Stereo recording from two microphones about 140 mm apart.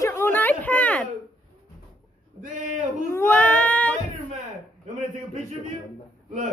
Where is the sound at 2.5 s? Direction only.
65° right (ahead or behind).